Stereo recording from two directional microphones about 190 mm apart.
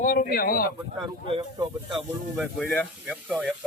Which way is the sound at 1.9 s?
Centre (ahead or behind).